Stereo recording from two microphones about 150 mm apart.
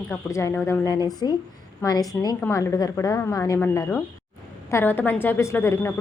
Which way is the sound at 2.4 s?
20° left (ahead or behind).